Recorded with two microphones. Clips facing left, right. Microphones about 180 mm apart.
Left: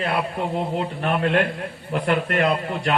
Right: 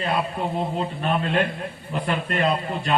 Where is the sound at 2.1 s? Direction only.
70° left (ahead or behind).